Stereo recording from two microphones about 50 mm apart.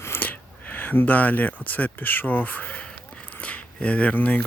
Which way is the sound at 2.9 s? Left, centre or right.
Left.